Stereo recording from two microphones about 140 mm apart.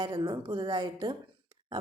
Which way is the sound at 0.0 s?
30° right (ahead or behind).